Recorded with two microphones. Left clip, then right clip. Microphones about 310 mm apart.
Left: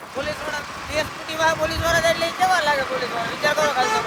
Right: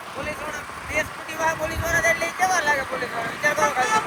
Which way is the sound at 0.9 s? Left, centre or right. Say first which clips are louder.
Left 2 dB; centre.